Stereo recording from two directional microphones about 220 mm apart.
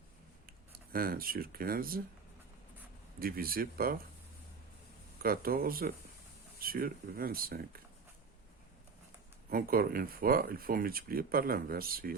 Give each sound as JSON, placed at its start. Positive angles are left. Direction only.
{"t": 0.9, "sound": "speech", "side_deg": -40}
{"t": 3.2, "sound": "speech", "side_deg": -40}
{"t": 5.2, "sound": "speech", "side_deg": -40}
{"t": 9.5, "sound": "speech", "side_deg": -40}